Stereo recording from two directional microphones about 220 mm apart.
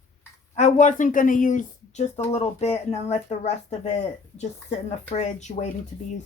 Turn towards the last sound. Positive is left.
turn(degrees=30)  # may be behind; listen again after turning